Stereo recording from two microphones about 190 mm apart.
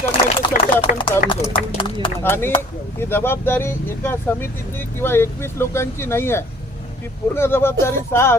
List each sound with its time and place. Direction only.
0.0 s a sound: 25° left (ahead or behind)
1.3 s speech: 25° left (ahead or behind)
2.2 s speech: 10° left (ahead or behind)